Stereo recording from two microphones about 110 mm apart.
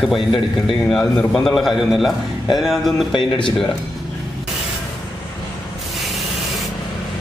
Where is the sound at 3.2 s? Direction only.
50° left (ahead or behind).